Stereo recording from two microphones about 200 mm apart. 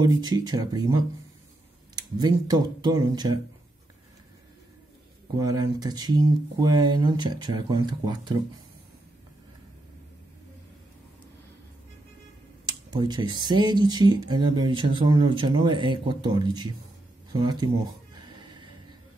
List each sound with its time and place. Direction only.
0.0 s speech: 20° right (ahead or behind)
2.0 s speech: 20° right (ahead or behind)
5.4 s speech: 20° right (ahead or behind)
12.6 s speech: 20° right (ahead or behind)
18.4 s snort: 20° right (ahead or behind)